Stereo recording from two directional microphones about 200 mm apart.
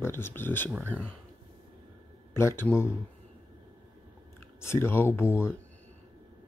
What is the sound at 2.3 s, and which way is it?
Speech, 10° left (ahead or behind).